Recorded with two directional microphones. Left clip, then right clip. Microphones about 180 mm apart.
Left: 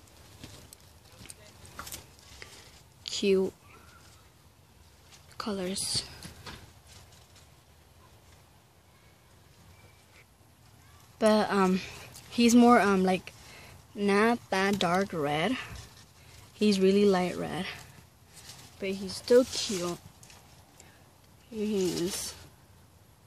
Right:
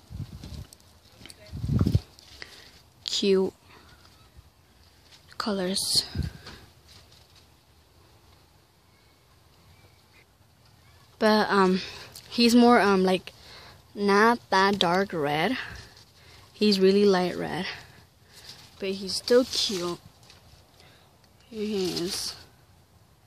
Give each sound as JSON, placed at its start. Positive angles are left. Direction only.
{"t": 1.2, "sound": "a sound", "side_deg": -15}
{"t": 2.4, "sound": "biting", "side_deg": -10}
{"t": 3.0, "sound": "a sound", "side_deg": -15}
{"t": 5.4, "sound": "speech", "side_deg": -15}
{"t": 11.1, "sound": "a woman's voice", "side_deg": -10}
{"t": 21.5, "sound": "speech", "side_deg": -5}